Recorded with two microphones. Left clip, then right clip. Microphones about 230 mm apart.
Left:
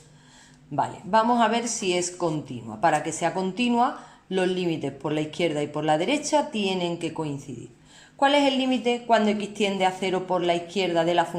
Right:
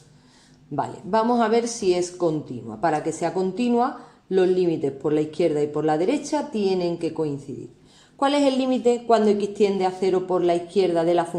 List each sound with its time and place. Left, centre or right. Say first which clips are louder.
0.8 s a woman's voice: left 1 dB; centre